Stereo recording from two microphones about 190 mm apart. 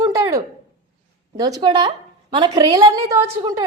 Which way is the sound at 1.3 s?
20° right (ahead or behind).